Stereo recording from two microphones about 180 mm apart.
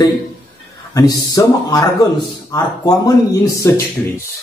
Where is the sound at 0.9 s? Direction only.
20° left (ahead or behind).